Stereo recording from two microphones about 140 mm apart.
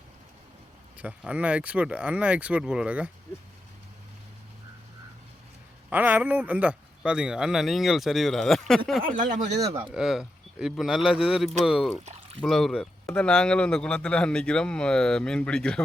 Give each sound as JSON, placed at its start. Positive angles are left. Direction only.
{"t": 0.9, "sound": "speech", "side_deg": -10}
{"t": 5.9, "sound": "a man's voice", "side_deg": -15}
{"t": 9.0, "sound": "speech", "side_deg": -65}
{"t": 9.8, "sound": "a man's voice", "side_deg": -5}